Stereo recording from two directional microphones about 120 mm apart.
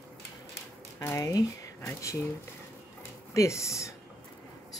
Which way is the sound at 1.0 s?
25° left (ahead or behind).